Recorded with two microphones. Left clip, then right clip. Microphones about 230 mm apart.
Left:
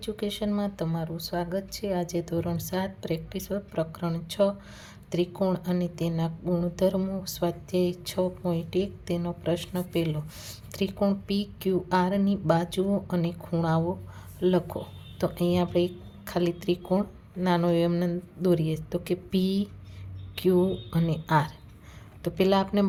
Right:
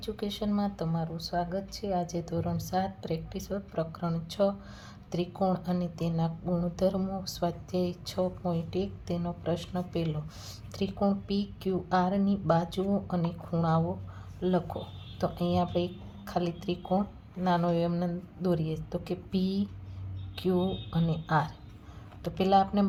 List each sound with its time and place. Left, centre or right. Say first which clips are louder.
0.0 s speech: left 3 dB; left